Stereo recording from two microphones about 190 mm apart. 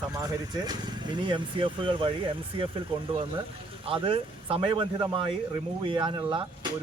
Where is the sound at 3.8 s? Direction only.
30° right (ahead or behind).